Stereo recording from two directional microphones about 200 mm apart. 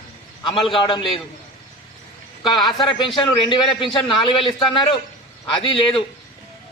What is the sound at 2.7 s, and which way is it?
A man's voice, 25° left (ahead or behind).